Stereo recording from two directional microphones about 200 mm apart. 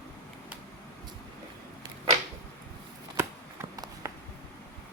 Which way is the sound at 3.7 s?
20° right (ahead or behind).